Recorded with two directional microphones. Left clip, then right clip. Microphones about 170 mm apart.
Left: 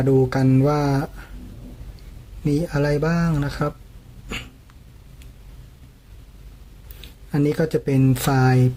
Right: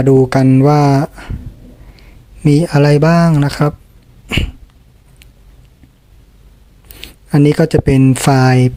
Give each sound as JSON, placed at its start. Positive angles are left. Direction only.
{"t": 0.0, "sound": "speech", "side_deg": -45}
{"t": 2.4, "sound": "speech", "side_deg": -45}
{"t": 7.0, "sound": "speech", "side_deg": -45}